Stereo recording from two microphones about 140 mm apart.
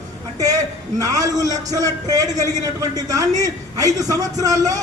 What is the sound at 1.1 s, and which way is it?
A man's voice, 25° right (ahead or behind).